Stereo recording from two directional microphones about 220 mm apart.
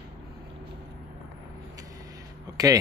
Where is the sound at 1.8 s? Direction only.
15° right (ahead or behind).